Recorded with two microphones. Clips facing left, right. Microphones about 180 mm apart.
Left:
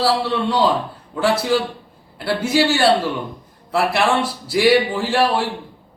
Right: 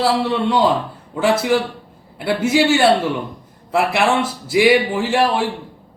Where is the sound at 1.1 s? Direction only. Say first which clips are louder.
Right 2 dB; 20° right (ahead or behind).